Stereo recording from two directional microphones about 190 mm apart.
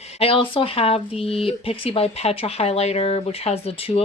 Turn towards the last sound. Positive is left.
turn(degrees=30)  # may be behind; listen again after turning